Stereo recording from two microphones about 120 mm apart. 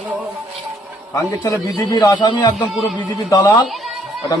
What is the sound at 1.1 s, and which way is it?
A man's voice, 30° left (ahead or behind).